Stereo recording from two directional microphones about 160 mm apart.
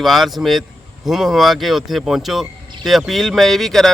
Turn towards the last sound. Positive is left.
turn(degrees=0)  # may be behind; listen again after turning